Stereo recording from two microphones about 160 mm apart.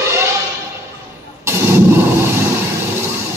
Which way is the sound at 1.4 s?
15° right (ahead or behind).